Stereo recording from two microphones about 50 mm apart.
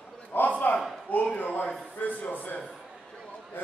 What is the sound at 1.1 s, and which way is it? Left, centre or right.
Speech, left.